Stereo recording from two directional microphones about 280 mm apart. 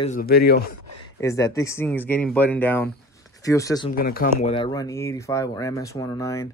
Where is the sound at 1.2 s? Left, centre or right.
Centre.